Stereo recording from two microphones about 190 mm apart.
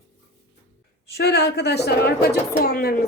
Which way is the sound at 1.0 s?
60° left (ahead or behind).